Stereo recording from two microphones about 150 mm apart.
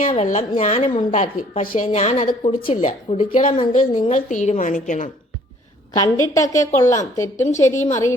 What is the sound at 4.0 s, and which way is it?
A woman's voice, 55° left (ahead or behind).